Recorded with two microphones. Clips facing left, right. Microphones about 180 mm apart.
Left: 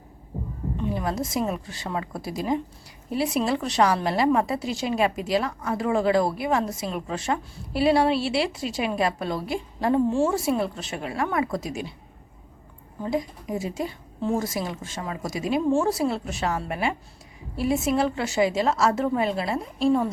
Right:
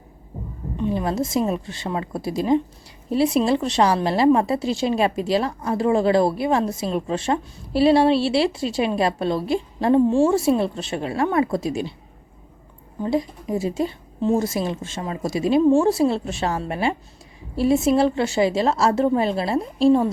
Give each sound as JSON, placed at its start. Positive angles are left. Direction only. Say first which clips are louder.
{"t": 0.8, "sound": "a woman's voice", "louder": "right 5 dB", "side_deg": -25}
{"t": 13.0, "sound": "a woman's voice", "louder": "right 4 dB", "side_deg": -30}